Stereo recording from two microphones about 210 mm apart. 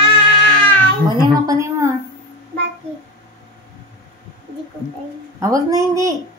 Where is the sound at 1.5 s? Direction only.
15° right (ahead or behind).